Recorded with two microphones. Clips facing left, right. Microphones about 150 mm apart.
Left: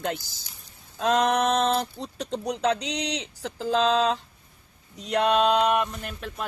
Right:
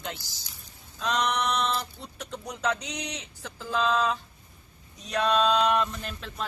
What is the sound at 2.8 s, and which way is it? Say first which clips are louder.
Speech: left 7 dB; 80° left.